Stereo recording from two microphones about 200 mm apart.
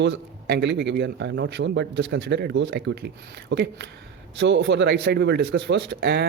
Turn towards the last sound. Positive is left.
turn(degrees=-60)  # may be behind; listen again after turning